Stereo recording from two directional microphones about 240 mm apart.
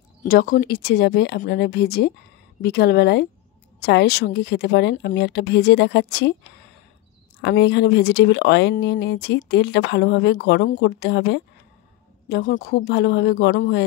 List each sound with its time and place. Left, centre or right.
0.2 s speech: left
7.4 s speech: left